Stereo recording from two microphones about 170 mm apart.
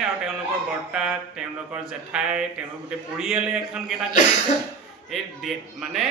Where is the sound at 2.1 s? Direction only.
5° right (ahead or behind).